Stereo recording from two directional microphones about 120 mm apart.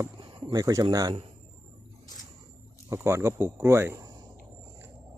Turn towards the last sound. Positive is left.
turn(degrees=-25)  # may be behind; listen again after turning